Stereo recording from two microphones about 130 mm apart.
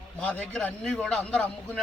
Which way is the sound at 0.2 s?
10° left (ahead or behind).